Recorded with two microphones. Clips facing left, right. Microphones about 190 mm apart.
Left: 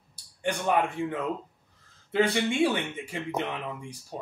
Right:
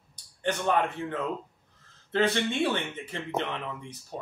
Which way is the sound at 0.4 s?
10° left (ahead or behind).